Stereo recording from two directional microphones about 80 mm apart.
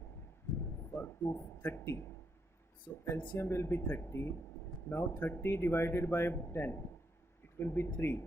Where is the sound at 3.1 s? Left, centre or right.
Left.